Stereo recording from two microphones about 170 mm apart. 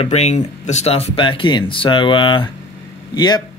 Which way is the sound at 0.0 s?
40° left (ahead or behind).